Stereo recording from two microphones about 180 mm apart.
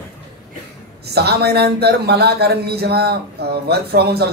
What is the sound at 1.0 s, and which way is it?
Speech, 65° right (ahead or behind).